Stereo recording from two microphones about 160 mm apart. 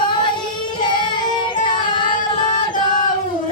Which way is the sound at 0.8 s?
30° left (ahead or behind).